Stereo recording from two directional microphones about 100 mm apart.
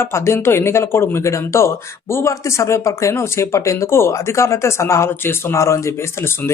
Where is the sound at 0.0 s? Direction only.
25° left (ahead or behind).